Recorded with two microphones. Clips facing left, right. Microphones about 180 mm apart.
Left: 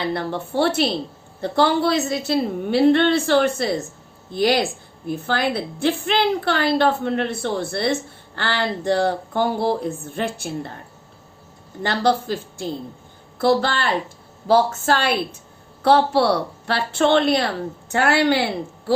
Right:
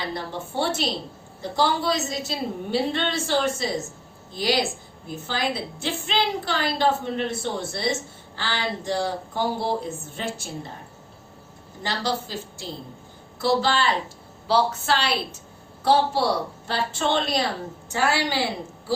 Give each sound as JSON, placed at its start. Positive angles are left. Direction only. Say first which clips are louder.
{"t": 0.1, "sound": "a woman's voice", "louder": "left 6 dB", "side_deg": 60}
{"t": 11.8, "sound": "a woman's voice", "louder": "left 7 dB", "side_deg": 55}
{"t": 15.8, "sound": "a woman's voice", "louder": "left 4 dB", "side_deg": 65}